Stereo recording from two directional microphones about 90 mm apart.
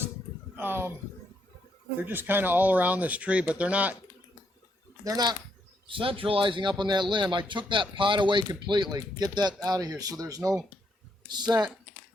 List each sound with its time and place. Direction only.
0.5 s speech: 25° right (ahead or behind)
2.0 s speech: 20° right (ahead or behind)
5.0 s speech: 50° right (ahead or behind)
5.9 s a man's voice: 85° right; by 10.6 s 40° right (ahead or behind)
11.3 s speech: 50° right (ahead or behind)